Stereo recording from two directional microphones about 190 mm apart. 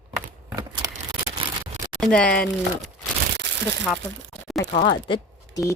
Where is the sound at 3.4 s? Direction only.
65° right (ahead or behind).